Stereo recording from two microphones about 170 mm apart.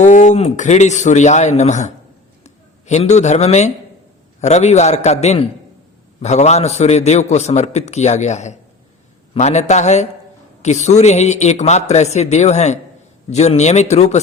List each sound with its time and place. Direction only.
0.0 s speech: 45° left (ahead or behind)
2.4 s a sound: 40° left (ahead or behind)
4.4 s a man's voice: 40° left (ahead or behind)